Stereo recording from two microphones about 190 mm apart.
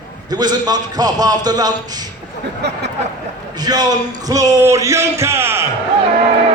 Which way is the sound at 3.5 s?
20° right (ahead or behind).